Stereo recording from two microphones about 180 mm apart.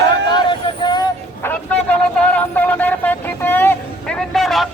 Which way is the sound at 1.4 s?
10° left (ahead or behind).